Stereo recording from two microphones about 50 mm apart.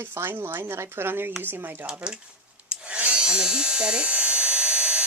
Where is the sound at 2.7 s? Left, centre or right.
Right.